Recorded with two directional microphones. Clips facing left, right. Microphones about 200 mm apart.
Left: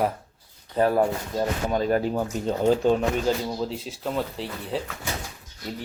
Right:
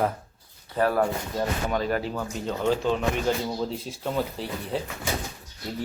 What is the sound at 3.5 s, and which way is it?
Speech, centre (ahead or behind).